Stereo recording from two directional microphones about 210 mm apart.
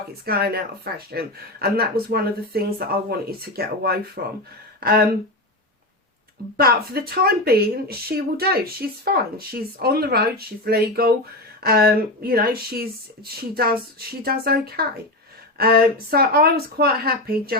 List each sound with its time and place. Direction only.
0.3 s speech: 45° right (ahead or behind)
6.6 s speech: 45° right (ahead or behind)